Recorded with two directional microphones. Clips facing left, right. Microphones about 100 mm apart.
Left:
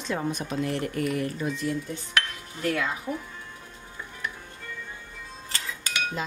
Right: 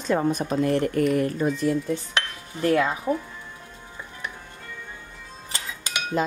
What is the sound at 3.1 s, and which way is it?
Speech, 50° right (ahead or behind).